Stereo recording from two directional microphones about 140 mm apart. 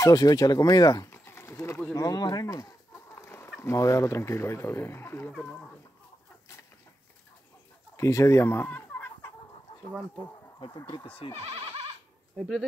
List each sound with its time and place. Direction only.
0.0 s speech: 25° left (ahead or behind)
1.1 s pigeon: 15° left (ahead or behind)
2.0 s speech: 25° left (ahead or behind)
3.2 s chicken: 20° left (ahead or behind)
3.6 s speech: 20° left (ahead or behind)
7.9 s speech: 20° left (ahead or behind)
10.9 s speech: 35° left (ahead or behind)
11.5 s goat: 50° right (ahead or behind)
12.4 s speech: centre (ahead or behind)